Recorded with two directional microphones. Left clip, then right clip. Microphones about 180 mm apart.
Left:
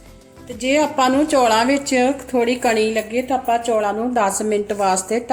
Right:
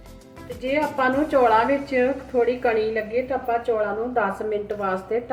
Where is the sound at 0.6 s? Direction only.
75° left (ahead or behind).